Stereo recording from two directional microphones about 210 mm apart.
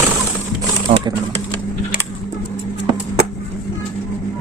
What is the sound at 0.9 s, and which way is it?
Speech, 35° right (ahead or behind).